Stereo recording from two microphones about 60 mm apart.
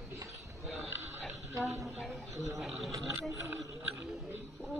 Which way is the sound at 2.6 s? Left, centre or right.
Centre.